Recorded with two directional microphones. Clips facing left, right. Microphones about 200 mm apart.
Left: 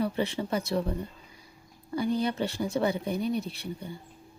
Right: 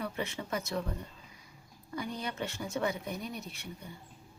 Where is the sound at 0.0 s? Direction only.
30° left (ahead or behind).